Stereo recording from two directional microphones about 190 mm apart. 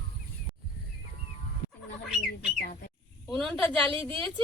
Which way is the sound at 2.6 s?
50° left (ahead or behind).